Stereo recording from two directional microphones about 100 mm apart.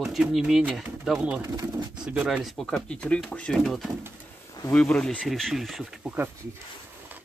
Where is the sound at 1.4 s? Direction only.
35° right (ahead or behind).